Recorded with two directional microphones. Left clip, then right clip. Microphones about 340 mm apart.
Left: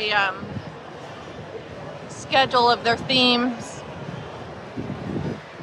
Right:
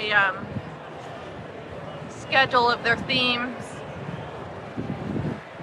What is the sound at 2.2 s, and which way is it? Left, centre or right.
Speech, centre.